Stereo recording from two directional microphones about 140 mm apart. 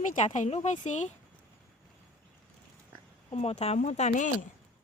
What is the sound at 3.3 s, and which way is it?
Speech, 50° left (ahead or behind).